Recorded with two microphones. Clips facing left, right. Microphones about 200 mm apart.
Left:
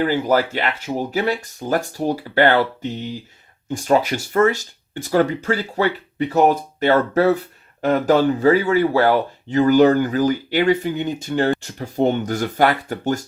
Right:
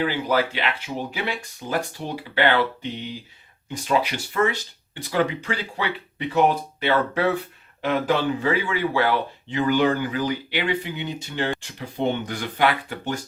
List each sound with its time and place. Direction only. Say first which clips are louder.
0.0 s speech: left 5 dB; 45° left (ahead or behind)